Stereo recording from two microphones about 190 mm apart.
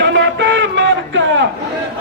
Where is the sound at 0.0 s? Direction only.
70° right (ahead or behind).